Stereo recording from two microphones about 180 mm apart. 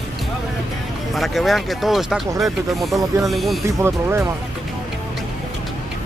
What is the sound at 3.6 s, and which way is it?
Speech, 15° right (ahead or behind).